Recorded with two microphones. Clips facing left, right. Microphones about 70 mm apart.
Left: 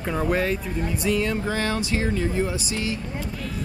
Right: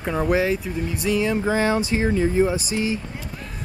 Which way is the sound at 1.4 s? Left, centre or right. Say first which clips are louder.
Right 5 dB; centre.